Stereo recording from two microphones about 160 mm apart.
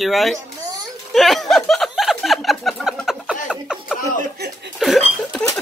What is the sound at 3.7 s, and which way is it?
Chuckle, 5° right (ahead or behind).